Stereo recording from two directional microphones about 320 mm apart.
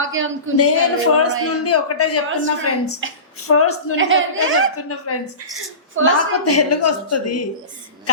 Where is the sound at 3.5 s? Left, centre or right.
Left.